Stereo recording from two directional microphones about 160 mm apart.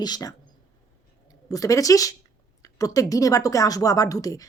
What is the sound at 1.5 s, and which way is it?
Speech, 20° left (ahead or behind).